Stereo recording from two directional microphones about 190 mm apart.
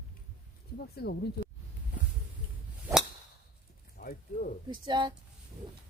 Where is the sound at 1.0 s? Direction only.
55° left (ahead or behind).